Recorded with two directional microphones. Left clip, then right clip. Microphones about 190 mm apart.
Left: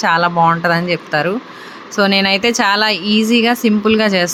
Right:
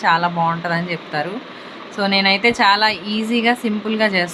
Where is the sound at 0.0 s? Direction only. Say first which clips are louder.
Left 4 dB; 30° left (ahead or behind).